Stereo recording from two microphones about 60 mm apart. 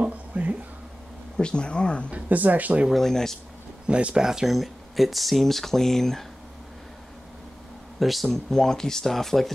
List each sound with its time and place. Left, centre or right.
0.0 s a sound: right
1.4 s speech: centre
2.0 s speech: right
2.9 s speech: centre
3.8 s speech: centre
8.0 s speech: centre